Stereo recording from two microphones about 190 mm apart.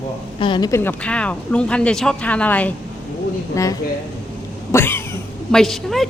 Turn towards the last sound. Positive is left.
turn(degrees=0)  # may be behind; listen again after turning